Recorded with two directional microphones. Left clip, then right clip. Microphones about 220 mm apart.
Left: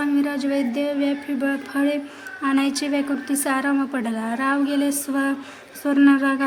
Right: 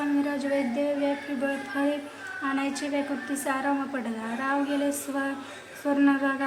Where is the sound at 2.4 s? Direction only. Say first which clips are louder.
Left 7 dB; 50° left (ahead or behind).